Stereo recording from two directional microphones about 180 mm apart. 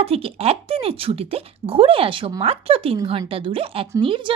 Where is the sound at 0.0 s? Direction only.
35° right (ahead or behind).